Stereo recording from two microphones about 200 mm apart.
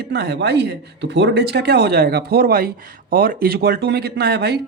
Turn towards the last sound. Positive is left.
turn(degrees=-55)  # may be behind; listen again after turning